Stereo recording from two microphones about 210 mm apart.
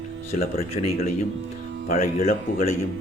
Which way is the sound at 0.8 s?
30° left (ahead or behind).